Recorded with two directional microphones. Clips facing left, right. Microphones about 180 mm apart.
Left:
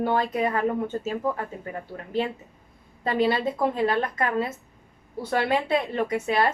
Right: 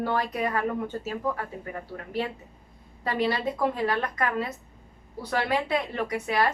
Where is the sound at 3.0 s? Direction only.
25° left (ahead or behind).